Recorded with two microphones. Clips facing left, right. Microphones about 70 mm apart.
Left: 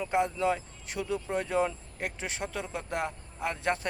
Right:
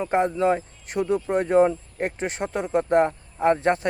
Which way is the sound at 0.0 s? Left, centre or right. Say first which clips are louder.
Right 6 dB; right.